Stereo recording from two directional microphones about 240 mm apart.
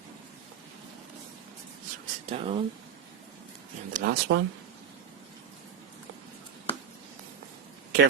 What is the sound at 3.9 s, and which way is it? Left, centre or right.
Speech, right.